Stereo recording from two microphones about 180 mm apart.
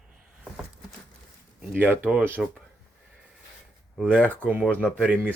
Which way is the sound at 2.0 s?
10° right (ahead or behind).